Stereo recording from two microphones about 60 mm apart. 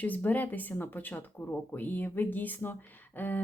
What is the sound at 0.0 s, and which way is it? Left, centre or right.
Speech, left.